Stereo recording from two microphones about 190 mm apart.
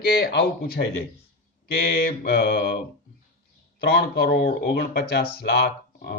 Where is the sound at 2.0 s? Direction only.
60° left (ahead or behind).